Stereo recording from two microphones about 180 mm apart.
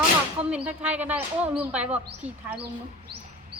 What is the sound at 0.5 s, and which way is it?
Speech, 5° right (ahead or behind).